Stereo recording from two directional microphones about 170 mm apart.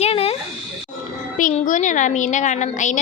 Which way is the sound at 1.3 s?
50° left (ahead or behind).